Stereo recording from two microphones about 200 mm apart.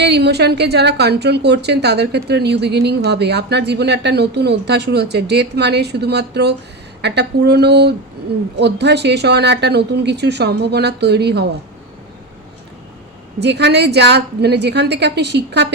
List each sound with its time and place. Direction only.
0.0 s a woman's voice: 55° right (ahead or behind)
13.4 s a woman's voice: 60° right (ahead or behind)